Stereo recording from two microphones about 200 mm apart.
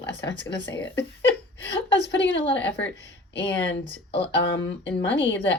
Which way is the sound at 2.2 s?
65° left (ahead or behind).